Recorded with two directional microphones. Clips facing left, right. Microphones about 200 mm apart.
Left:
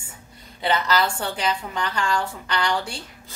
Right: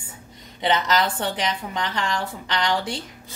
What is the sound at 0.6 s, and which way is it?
A woman's voice, 20° right (ahead or behind).